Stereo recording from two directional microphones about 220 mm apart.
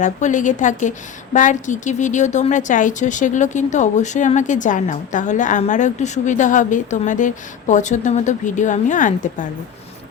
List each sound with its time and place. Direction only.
0.0 s a woman's voice: 35° left (ahead or behind)